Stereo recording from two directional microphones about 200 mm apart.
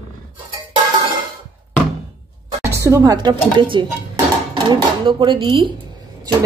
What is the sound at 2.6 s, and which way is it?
Speech, 15° right (ahead or behind).